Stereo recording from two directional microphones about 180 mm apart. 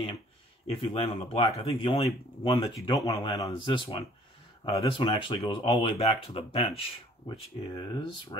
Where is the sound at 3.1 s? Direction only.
30° left (ahead or behind).